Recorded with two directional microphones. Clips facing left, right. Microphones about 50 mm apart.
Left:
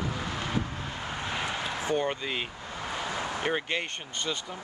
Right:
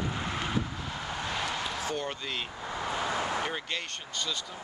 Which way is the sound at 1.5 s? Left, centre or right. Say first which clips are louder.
Left 3 dB; left.